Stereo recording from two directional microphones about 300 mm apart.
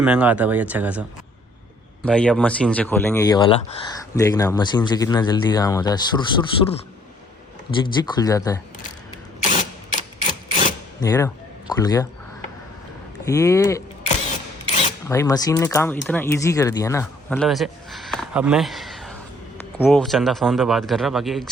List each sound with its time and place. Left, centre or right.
0.0 s speech: centre
2.0 s speech: centre
7.8 s speech: centre
9.4 s rub: left
11.0 s speech: centre
13.2 s speech: centre
15.0 s speech: centre